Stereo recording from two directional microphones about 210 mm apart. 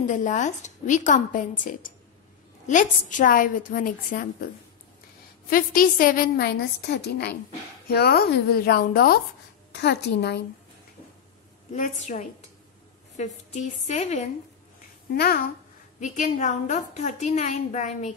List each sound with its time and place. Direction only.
0.1 s a woman's voice: 35° left (ahead or behind)
5.5 s a woman's voice: 40° left (ahead or behind)
11.7 s a woman's voice: 35° left (ahead or behind)
15.1 s a woman's voice: 45° left (ahead or behind)
16.0 s a woman's voice: 35° left (ahead or behind)